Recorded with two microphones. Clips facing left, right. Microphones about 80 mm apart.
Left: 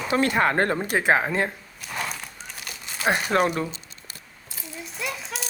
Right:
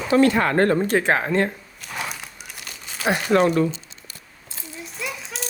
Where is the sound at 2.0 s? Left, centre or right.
Centre.